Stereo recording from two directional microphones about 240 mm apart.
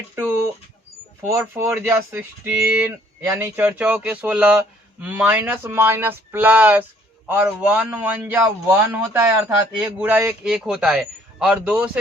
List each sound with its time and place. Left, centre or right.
0.2 s a man's voice: centre